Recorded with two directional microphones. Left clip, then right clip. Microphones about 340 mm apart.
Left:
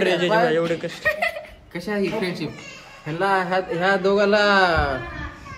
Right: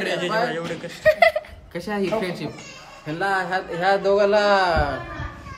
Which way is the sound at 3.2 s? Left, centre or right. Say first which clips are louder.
Left 2 dB; centre.